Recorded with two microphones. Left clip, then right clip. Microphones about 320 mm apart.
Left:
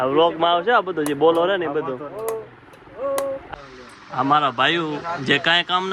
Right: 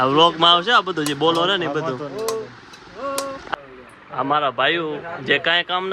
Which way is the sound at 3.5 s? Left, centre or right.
Centre.